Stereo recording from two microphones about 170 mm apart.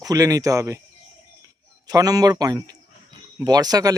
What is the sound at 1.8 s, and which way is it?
A man's voice, 20° right (ahead or behind).